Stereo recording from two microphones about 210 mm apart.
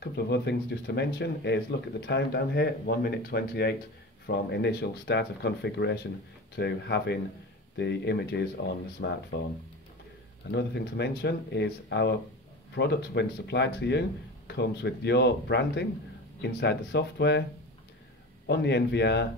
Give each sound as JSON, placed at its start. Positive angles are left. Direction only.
{"t": 0.0, "sound": "speech", "side_deg": 55}
{"t": 10.5, "sound": "speech", "side_deg": 50}
{"t": 18.5, "sound": "speech", "side_deg": 55}